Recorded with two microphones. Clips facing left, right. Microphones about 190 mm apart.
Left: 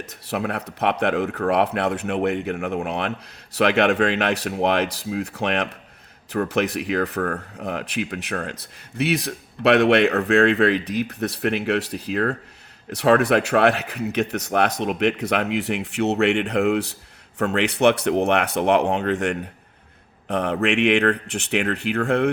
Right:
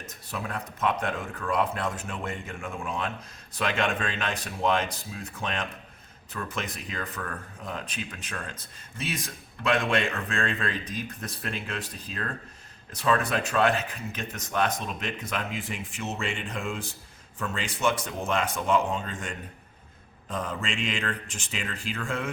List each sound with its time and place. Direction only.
0.3 s speech: 70° left (ahead or behind)